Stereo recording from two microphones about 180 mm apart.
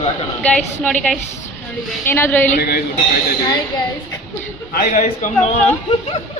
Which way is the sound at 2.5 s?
60° left (ahead or behind).